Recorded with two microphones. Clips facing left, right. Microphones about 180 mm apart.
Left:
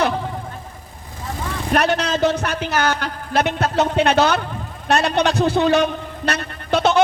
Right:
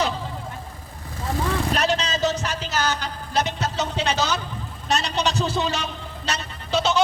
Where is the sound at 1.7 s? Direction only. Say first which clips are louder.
Left 5 dB; 60° left (ahead or behind).